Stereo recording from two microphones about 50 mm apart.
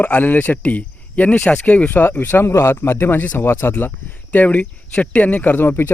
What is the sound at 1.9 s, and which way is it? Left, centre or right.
Speech, left.